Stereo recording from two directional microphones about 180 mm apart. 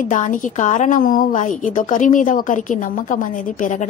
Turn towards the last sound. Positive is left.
turn(degrees=45)  # may be behind; listen again after turning